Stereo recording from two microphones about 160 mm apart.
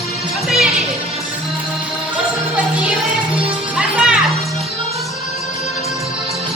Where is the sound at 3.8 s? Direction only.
5° right (ahead or behind).